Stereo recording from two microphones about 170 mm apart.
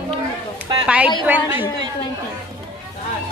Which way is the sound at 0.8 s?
10° right (ahead or behind).